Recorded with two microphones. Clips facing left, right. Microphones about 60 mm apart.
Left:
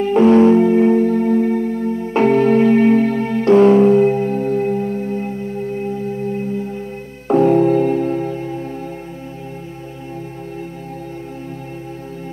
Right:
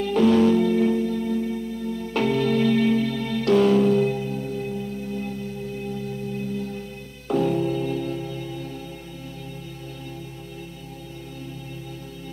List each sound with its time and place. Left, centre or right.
0.0 s music: left
2.0 s music: left
7.2 s music: left